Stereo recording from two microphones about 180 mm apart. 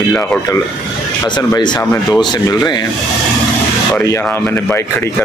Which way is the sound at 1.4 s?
25° left (ahead or behind).